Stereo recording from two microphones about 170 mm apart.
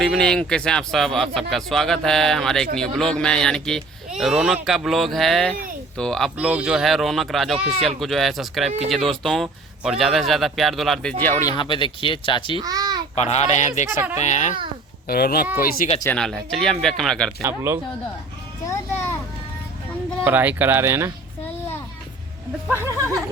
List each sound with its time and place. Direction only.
0.0 s speech: 5° left (ahead or behind)
6.3 s speech: 5° right (ahead or behind); by 12.5 s 30° left (ahead or behind)
12.5 s a child's voice: 25° right (ahead or behind)
13.1 s a child's voice: 40° left (ahead or behind)
15.0 s speech: 65° left (ahead or behind)
16.0 s speech: 5° left (ahead or behind)
17.4 s speech: 15° right (ahead or behind)
18.6 s a sound: 15° left (ahead or behind)
20.2 s speech: 10° right (ahead or behind)
22.7 s speech: 15° right (ahead or behind)